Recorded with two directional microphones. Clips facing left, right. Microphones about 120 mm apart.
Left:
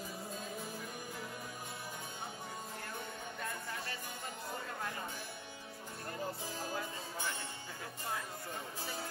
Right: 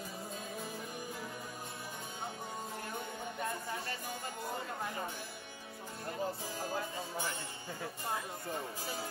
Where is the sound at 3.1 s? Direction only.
25° right (ahead or behind).